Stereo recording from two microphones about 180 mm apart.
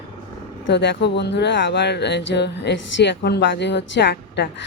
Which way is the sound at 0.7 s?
75° left (ahead or behind).